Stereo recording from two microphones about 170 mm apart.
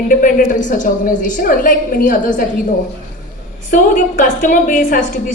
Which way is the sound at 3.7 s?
50° left (ahead or behind).